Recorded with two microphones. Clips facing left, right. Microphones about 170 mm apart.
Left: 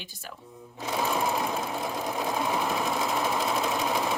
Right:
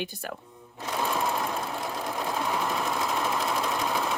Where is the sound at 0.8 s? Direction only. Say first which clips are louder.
Left 1 dB; 10° left (ahead or behind).